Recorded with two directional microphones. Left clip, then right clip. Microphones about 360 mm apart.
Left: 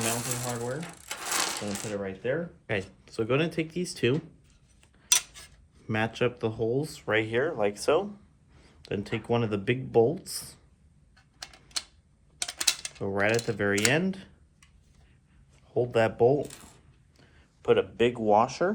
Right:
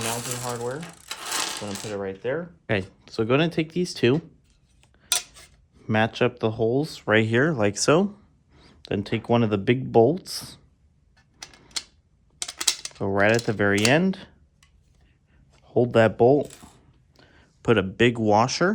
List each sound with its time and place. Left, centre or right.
0.0 s ratchet: centre
0.9 s mechanisms: centre
1.9 s speech: right
5.1 s cutlery: centre
5.8 s speech: right
11.3 s typewriter: centre
12.4 s a sound: centre
13.0 s speech: right
15.6 s speech: right
17.2 s a sound: right
18.3 s speech: right